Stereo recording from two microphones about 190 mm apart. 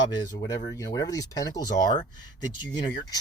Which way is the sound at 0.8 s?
20° left (ahead or behind).